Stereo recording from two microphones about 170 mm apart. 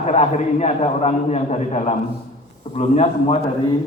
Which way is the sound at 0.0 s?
40° left (ahead or behind).